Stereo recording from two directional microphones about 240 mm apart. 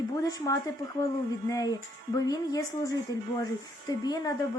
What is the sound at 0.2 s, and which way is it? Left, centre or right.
Speech, centre.